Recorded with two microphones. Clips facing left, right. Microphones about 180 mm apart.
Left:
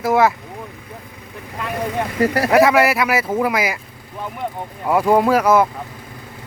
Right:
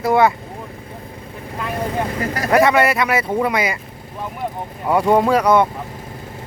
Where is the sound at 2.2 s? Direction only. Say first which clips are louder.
Left 6 dB; 30° left (ahead or behind).